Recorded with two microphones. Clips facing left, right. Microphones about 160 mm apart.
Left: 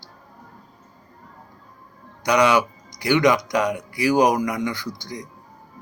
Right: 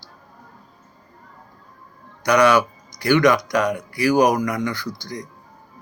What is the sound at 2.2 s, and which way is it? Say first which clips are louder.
Speech: right 2 dB; 20° left (ahead or behind).